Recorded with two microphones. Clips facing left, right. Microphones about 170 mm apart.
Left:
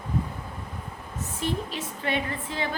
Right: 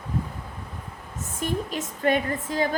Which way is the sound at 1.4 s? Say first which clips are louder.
Right 2 dB; 45° right (ahead or behind).